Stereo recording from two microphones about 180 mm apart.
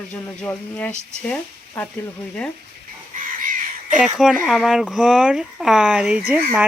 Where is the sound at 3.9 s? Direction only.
5° right (ahead or behind).